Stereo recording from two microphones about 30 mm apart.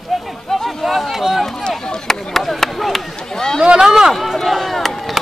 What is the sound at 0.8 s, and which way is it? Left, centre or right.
Speech, centre.